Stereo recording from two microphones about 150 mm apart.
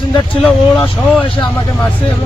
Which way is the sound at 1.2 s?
35° left (ahead or behind).